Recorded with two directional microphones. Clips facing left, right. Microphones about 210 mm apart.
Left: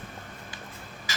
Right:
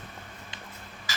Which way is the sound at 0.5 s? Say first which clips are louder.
Left 1 dB; 20° right (ahead or behind).